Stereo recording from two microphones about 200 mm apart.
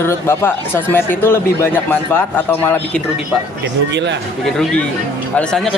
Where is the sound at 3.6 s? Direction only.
60° right (ahead or behind).